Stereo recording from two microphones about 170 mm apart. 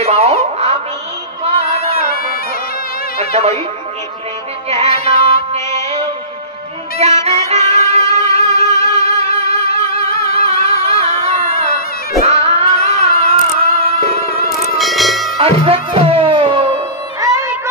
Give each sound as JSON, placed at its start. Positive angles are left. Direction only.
{"t": 0.0, "sound": "a sound", "side_deg": -40}
{"t": 1.4, "sound": "music", "side_deg": -35}
{"t": 2.0, "sound": "bagpipes", "side_deg": 60}
{"t": 3.3, "sound": "speech", "side_deg": -40}
{"t": 4.6, "sound": "music", "side_deg": -40}
{"t": 7.2, "sound": "music", "side_deg": -40}
{"t": 10.4, "sound": "a sound", "side_deg": -35}
{"t": 12.2, "sound": "cat", "side_deg": -35}
{"t": 14.8, "sound": "music", "side_deg": 0}
{"t": 15.3, "sound": "music", "side_deg": -35}
{"t": 17.2, "sound": "music", "side_deg": -20}